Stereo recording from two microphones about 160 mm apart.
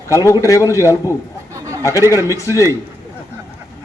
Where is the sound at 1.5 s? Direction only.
20° right (ahead or behind).